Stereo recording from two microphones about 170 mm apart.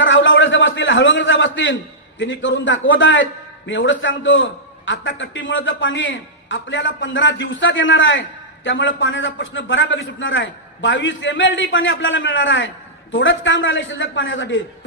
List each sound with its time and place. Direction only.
0.0 s a man's voice: 90° left